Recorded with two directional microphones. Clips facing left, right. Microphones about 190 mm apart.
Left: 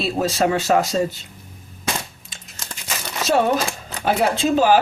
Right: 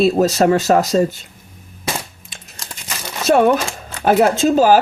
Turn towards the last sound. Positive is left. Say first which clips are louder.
# right 4 dB
turn(degrees=-40)  # may be behind; listen again after turning